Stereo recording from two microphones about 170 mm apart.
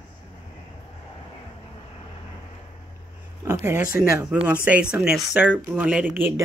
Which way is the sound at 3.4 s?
15° right (ahead or behind).